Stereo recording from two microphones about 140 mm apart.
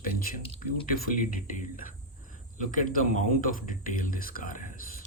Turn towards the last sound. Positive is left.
turn(degrees=80)